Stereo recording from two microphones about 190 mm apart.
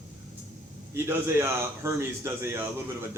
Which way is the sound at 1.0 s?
15° right (ahead or behind).